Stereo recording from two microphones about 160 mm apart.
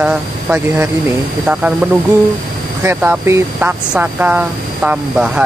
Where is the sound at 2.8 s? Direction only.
10° right (ahead or behind).